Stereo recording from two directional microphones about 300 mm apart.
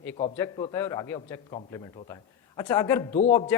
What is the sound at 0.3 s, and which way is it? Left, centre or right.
A man's voice, centre.